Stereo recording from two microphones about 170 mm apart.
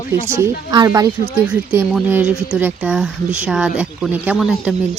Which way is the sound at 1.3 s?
10° right (ahead or behind).